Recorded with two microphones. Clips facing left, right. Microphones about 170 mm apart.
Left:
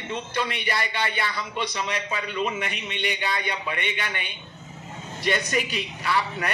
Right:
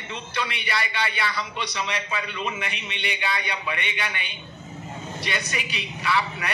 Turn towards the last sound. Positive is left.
turn(degrees=45)  # may be behind; listen again after turning